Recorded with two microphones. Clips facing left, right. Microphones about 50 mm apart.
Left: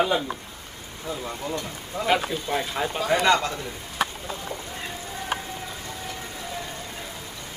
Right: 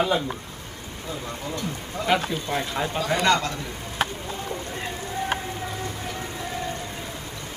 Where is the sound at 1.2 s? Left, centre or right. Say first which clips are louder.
Right 1 dB; centre.